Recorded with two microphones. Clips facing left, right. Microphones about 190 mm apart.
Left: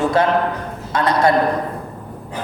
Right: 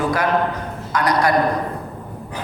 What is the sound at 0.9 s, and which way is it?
Speech, 25° left (ahead or behind).